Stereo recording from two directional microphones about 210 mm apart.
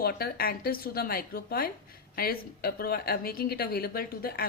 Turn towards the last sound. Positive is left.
turn(degrees=45)  # may be behind; listen again after turning